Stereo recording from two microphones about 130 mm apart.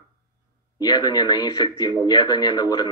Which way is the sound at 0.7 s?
35° left (ahead or behind).